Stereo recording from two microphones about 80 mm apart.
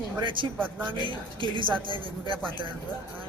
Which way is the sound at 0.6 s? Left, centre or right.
Right.